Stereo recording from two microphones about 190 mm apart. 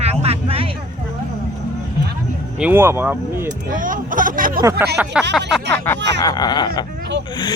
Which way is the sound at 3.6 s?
45° right (ahead or behind).